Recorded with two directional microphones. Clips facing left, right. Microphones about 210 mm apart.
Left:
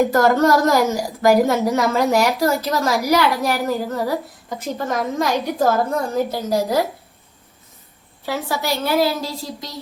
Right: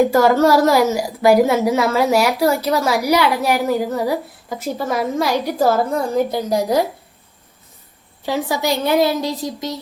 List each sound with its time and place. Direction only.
0.1 s a woman's voice: 10° right (ahead or behind)
8.2 s a woman's voice: 15° right (ahead or behind)